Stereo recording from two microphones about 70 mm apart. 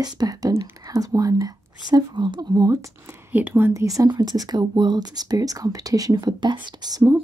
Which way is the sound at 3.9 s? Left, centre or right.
Right.